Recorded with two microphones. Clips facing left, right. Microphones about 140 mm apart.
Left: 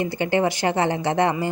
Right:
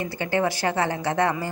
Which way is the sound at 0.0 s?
20° left (ahead or behind).